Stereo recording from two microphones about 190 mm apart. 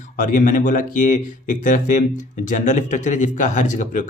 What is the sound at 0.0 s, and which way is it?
Speech, 40° left (ahead or behind).